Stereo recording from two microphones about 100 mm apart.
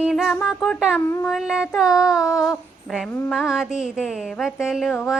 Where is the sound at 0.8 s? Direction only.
5° right (ahead or behind).